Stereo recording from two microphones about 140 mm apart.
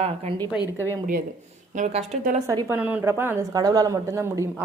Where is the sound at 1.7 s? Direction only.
65° right (ahead or behind).